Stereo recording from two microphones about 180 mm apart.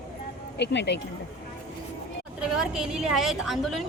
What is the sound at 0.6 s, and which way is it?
Speech, 75° left (ahead or behind).